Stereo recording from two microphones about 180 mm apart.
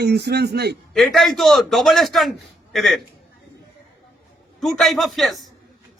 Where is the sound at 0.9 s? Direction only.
Centre (ahead or behind).